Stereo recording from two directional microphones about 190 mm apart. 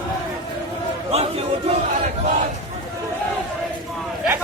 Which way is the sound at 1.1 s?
35° right (ahead or behind).